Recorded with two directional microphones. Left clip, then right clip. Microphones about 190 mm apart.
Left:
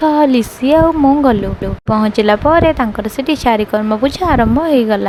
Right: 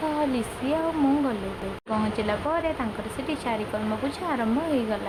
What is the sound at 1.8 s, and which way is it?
Speech, 50° left (ahead or behind).